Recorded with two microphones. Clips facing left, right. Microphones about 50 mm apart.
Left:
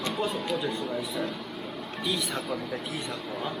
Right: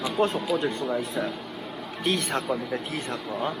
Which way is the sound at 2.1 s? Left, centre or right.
Right.